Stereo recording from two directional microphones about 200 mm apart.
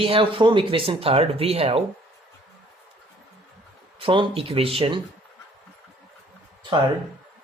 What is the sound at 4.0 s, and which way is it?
Speech, 25° right (ahead or behind).